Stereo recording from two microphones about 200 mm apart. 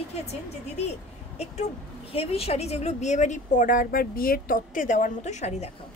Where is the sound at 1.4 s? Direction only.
30° left (ahead or behind).